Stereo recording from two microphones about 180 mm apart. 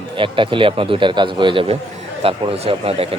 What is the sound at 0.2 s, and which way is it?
Speech, 30° right (ahead or behind).